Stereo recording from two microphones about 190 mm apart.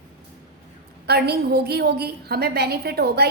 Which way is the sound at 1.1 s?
60° right (ahead or behind).